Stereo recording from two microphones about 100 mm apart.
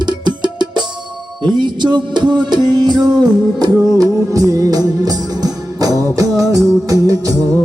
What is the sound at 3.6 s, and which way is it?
Music, 35° right (ahead or behind).